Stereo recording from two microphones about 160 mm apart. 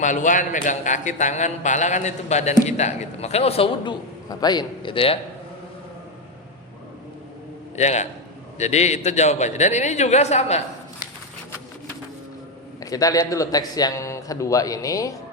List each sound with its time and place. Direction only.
0.0 s a man's voice: 50° left (ahead or behind)
4.3 s a man's voice: 25° left (ahead or behind)
7.8 s a man's voice: 45° left (ahead or behind)
12.8 s a man's voice: 20° left (ahead or behind)